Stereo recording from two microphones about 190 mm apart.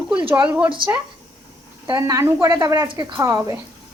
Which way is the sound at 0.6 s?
25° right (ahead or behind).